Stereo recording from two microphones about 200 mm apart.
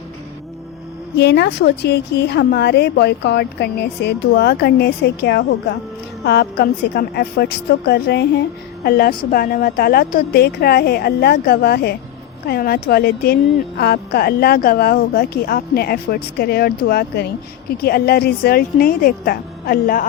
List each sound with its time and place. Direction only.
1.1 s a woman's voice: 60° left (ahead or behind)